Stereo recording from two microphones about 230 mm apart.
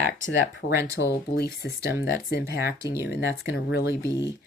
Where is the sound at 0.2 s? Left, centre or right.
Left.